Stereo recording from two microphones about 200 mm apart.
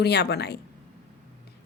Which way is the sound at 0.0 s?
55° left (ahead or behind).